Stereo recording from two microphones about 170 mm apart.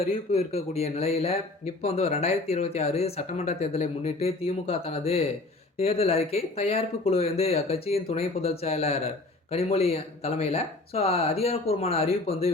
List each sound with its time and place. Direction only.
0.0 s speech: 35° left (ahead or behind)